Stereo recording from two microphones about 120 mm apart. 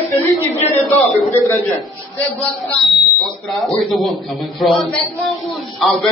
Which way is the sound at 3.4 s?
Centre (ahead or behind).